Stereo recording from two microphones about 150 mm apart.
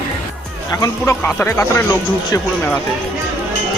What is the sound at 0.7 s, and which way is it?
Speech, 25° left (ahead or behind).